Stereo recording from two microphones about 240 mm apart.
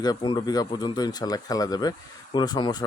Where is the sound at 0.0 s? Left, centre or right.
Centre.